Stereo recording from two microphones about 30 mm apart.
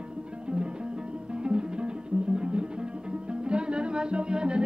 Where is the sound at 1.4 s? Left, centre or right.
Right.